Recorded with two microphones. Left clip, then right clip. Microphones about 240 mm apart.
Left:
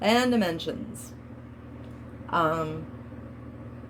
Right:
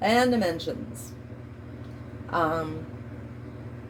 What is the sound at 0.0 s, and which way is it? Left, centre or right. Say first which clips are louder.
Speech: right 1 dB; left.